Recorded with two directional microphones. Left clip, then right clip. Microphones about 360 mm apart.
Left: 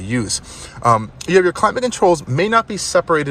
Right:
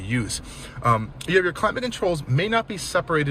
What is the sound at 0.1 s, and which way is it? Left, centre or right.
Speech, centre.